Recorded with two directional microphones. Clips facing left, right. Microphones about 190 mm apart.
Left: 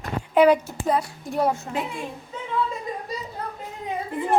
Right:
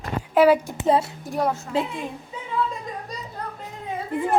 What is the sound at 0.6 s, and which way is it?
Speech, 20° right (ahead or behind).